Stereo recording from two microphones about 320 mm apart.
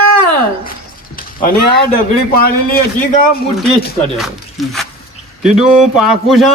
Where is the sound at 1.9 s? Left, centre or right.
Left.